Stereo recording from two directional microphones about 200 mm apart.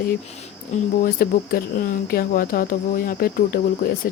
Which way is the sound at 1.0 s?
45° left (ahead or behind).